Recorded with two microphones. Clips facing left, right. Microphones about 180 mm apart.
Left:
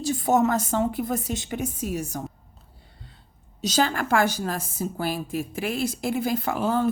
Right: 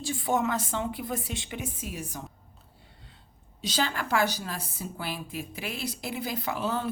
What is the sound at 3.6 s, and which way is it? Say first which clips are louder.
A woman's voice: left 6 dB; 45° left (ahead or behind).